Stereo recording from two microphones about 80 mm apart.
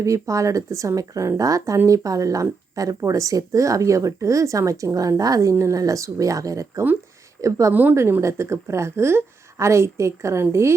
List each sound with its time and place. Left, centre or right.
0.0 s a woman's voice: right
7.7 s a woman's voice: right
7.9 s a woman's voice: right